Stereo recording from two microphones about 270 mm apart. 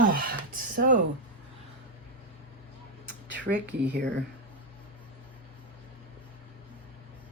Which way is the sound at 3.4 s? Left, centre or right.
Right.